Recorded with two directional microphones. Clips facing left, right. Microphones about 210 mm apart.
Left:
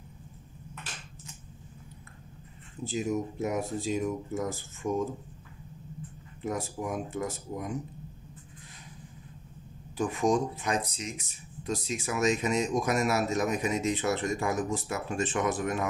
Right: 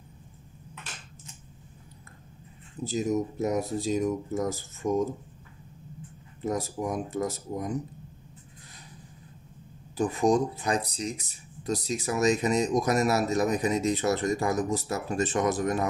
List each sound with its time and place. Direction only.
2.8 s speech: 40° right (ahead or behind)
6.4 s speech: 35° right (ahead or behind)
9.9 s speech: 35° right (ahead or behind)